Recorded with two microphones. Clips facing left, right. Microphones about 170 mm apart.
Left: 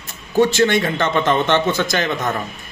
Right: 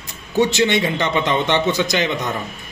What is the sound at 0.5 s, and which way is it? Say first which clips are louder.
Speech: left 2 dB; 50° left (ahead or behind).